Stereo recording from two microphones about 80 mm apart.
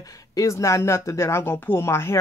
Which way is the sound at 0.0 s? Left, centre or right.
Left.